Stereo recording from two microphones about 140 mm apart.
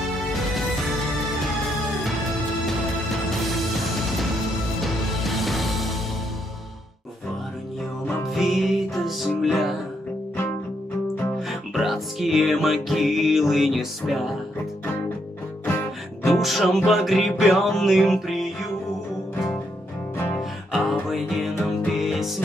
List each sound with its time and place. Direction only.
1.4 s music: centre (ahead or behind)
8.4 s music: centre (ahead or behind)
11.4 s music: centre (ahead or behind)
16.3 s music: centre (ahead or behind)
20.7 s music: centre (ahead or behind)